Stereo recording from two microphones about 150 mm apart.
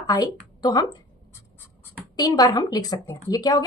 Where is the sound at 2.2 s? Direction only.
25° left (ahead or behind).